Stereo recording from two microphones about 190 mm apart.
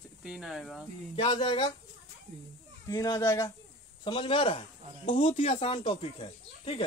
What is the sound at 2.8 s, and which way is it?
Speech, 20° left (ahead or behind).